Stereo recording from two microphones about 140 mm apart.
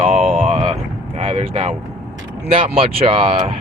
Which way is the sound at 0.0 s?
50° right (ahead or behind).